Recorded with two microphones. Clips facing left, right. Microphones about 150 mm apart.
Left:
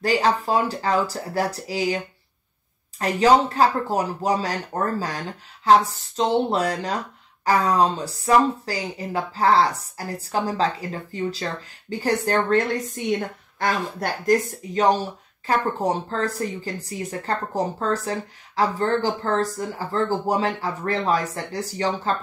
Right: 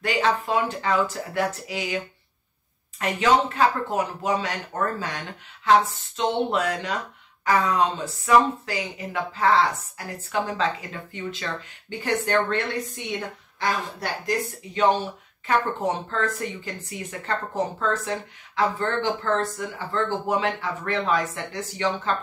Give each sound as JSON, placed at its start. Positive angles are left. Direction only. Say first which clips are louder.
{"t": 0.0, "sound": "a woman's voice", "louder": "left 3 dB", "side_deg": 35}
{"t": 3.0, "sound": "a woman's voice", "louder": "left 4 dB", "side_deg": 35}